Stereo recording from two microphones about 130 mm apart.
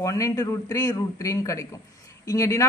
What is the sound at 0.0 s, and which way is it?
Speech, 25° left (ahead or behind).